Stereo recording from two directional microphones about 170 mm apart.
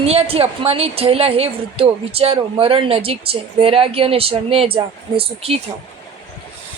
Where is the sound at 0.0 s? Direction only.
35° right (ahead or behind).